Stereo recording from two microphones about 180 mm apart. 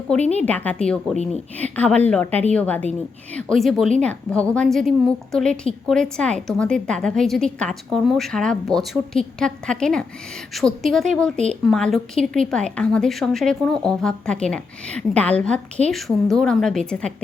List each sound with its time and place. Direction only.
0.1 s a woman's voice: 5° left (ahead or behind)